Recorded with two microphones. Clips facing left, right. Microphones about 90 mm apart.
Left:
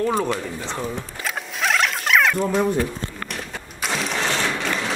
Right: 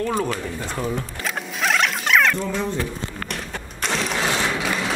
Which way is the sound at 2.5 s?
10° left (ahead or behind).